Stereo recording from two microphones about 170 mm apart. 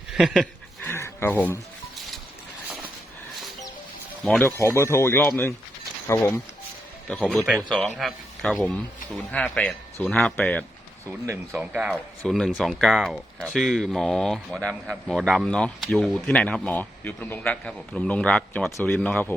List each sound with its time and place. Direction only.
0.1 s dog: centre (ahead or behind)
0.9 s dog: 15° left (ahead or behind)
4.2 s speech: 5° left (ahead or behind)
4.4 s a man's voice: 15° left (ahead or behind)
11.3 s speech: 10° right (ahead or behind); by 19.3 s 10° left (ahead or behind)